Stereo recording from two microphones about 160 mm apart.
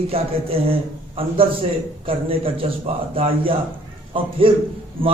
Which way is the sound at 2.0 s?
35° right (ahead or behind).